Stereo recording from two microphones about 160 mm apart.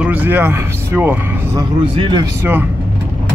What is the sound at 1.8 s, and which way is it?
Speech, 30° right (ahead or behind).